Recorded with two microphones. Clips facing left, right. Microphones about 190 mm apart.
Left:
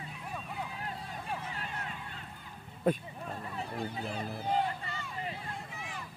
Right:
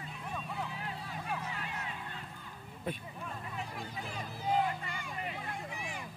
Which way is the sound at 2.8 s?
40° left (ahead or behind).